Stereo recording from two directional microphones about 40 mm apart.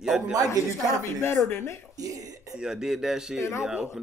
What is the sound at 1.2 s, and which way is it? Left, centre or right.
Speech, left.